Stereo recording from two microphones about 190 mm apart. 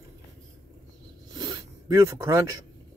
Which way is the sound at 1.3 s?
20° right (ahead or behind).